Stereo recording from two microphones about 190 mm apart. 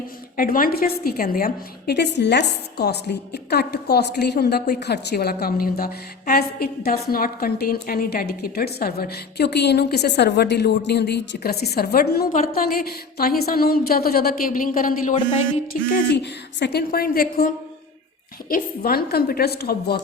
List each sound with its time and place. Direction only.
0.3 s a woman's voice: 50° left (ahead or behind)
15.7 s a woman's voice: 60° left (ahead or behind)